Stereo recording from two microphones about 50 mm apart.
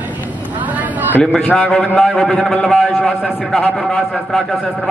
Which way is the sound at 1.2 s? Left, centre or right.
Left.